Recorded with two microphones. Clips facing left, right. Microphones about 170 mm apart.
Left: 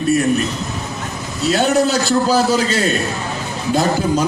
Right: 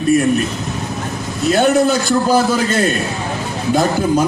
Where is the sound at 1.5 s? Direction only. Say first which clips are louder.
Right 2 dB; 55° right (ahead or behind).